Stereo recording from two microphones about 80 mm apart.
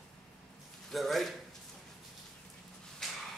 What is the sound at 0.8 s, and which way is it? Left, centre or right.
Speech, centre.